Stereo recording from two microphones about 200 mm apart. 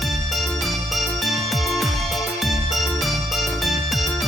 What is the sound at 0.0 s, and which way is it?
Music, centre (ahead or behind).